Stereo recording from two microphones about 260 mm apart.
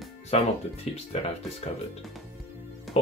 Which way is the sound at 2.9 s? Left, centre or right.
Left.